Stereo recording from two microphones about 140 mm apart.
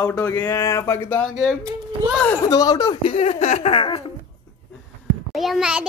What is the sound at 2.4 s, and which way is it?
Speech, 25° left (ahead or behind).